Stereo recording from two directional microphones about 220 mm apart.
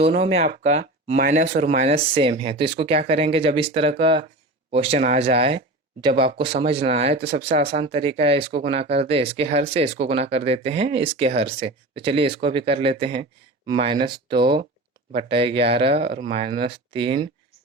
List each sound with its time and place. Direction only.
0.0 s speech: 30° right (ahead or behind)